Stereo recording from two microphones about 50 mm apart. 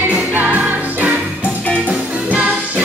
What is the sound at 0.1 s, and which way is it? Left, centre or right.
Music, right.